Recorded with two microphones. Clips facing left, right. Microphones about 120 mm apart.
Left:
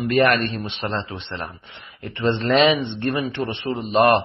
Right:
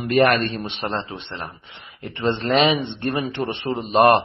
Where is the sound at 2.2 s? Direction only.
40° right (ahead or behind).